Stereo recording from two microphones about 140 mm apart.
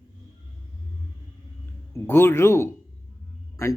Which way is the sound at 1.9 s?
15° left (ahead or behind).